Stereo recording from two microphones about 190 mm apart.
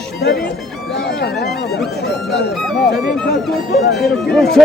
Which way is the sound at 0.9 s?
60° left (ahead or behind).